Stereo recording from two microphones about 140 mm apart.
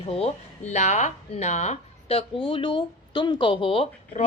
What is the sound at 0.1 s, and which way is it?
Speech, 45° left (ahead or behind).